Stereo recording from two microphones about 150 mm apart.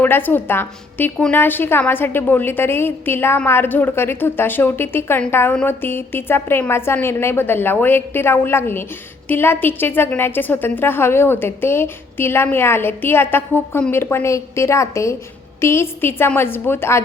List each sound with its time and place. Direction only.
0.0 s a woman's voice: 10° left (ahead or behind)